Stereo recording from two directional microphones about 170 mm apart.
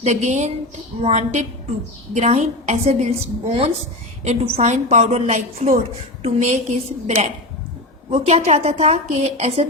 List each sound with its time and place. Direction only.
0.0 s a woman's voice: 40° right (ahead or behind)
8.1 s a woman's voice: 40° right (ahead or behind)